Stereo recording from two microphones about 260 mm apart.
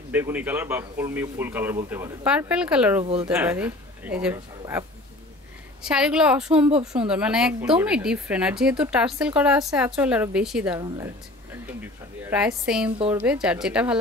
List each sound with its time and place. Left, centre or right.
0.1 s a man's voice: centre
3.0 s speech: right
3.3 s a man's voice: centre
12.3 s a woman's voice: centre